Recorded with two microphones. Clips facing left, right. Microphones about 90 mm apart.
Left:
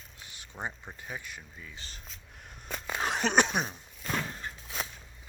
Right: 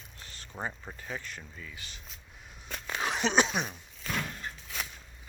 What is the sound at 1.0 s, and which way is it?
Speech, 15° left (ahead or behind).